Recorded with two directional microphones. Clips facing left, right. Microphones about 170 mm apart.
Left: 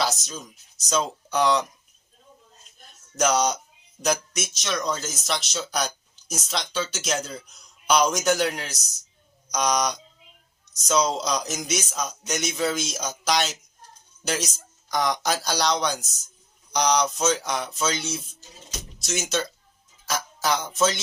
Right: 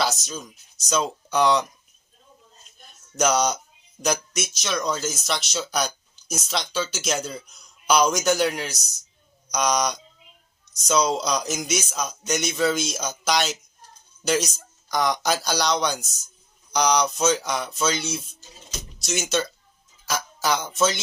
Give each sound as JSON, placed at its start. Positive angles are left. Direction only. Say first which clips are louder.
{"t": 0.0, "sound": "speech", "louder": "right 1 dB", "side_deg": 0}
{"t": 3.2, "sound": "speech", "louder": "right 1 dB", "side_deg": 0}